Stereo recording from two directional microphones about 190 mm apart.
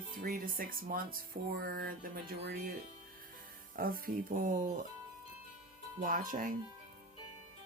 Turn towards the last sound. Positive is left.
turn(degrees=-45)  # may be behind; listen again after turning